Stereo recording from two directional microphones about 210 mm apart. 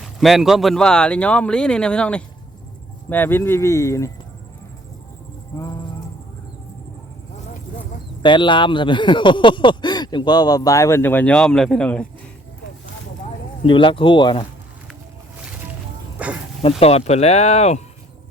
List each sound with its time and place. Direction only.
0.0 s speech: centre (ahead or behind)
5.5 s music: 15° left (ahead or behind)
8.2 s speech: 20° left (ahead or behind); by 12.0 s 5° left (ahead or behind)
13.7 s speech: 25° left (ahead or behind)
16.1 s snake: 5° right (ahead or behind)
16.8 s speech: 30° left (ahead or behind)